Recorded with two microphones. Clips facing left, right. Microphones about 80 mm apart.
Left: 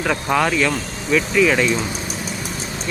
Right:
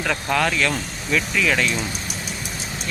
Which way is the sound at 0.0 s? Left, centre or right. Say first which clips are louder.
Left 3 dB; centre.